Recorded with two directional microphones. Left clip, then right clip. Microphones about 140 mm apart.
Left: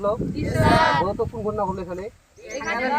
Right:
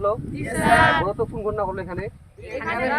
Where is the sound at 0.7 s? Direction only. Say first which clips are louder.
Right 2 dB; 30° right (ahead or behind).